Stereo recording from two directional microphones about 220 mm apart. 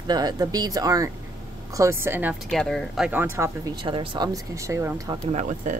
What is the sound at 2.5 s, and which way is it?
Speech, centre (ahead or behind).